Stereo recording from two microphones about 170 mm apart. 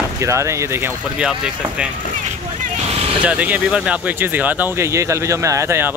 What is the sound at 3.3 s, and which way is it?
Speech, 10° right (ahead or behind).